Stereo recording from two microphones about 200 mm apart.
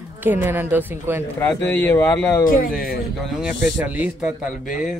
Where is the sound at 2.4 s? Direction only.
45° left (ahead or behind).